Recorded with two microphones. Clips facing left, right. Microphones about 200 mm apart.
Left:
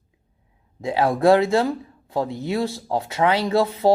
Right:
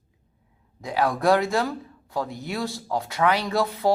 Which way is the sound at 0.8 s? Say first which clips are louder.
Left 4 dB; 30° left (ahead or behind).